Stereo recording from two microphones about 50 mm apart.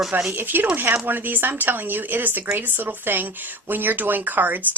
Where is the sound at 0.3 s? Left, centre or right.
Right.